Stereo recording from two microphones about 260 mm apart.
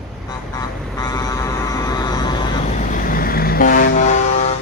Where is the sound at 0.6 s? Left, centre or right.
Centre.